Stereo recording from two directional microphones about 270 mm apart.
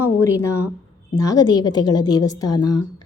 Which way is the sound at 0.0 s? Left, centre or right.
Centre.